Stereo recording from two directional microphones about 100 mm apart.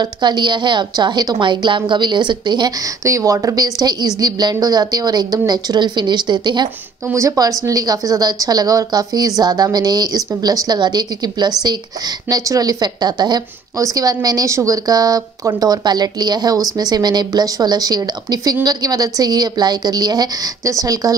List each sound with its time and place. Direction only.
0.0 s a woman's voice: 45° right (ahead or behind)
3.0 s a woman's voice: 30° right (ahead or behind); by 6.7 s 50° right (ahead or behind)
7.2 s a woman's voice: 35° right (ahead or behind)